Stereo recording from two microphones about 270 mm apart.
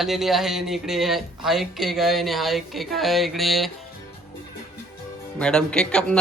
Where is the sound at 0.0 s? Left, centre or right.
Centre.